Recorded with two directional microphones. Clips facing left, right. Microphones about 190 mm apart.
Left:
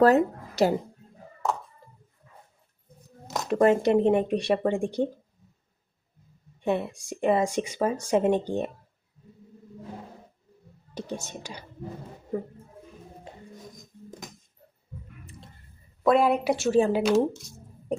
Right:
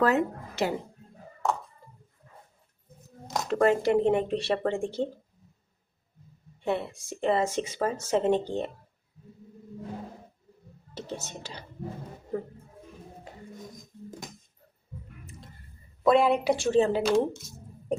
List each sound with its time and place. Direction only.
0.0 s speech: 35° left (ahead or behind)
3.5 s speech: 20° left (ahead or behind)
6.6 s speech: 15° left (ahead or behind)
10.9 s speech: 15° left (ahead or behind)
16.0 s a woman's voice: centre (ahead or behind)
17.0 s a sound: centre (ahead or behind)